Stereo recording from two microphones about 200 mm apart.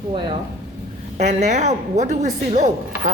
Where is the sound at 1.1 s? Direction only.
35° right (ahead or behind).